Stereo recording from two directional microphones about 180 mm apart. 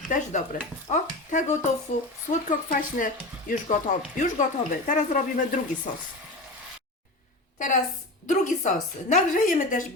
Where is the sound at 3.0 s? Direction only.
50° left (ahead or behind).